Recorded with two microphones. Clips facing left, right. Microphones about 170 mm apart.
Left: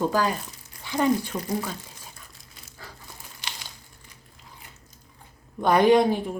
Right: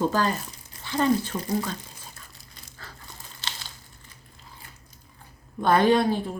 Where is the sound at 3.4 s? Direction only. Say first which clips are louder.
Right 1 dB; 15° left (ahead or behind).